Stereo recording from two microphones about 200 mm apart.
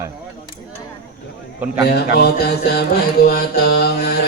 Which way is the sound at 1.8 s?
55° left (ahead or behind).